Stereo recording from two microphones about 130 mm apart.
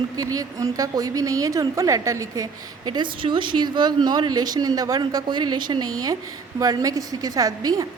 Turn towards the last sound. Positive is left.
turn(degrees=-30)  # may be behind; listen again after turning